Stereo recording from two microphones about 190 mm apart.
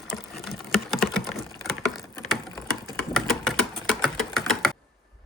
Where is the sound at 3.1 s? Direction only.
Centre (ahead or behind).